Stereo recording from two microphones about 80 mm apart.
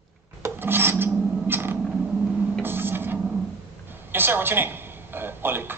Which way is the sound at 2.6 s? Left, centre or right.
Right.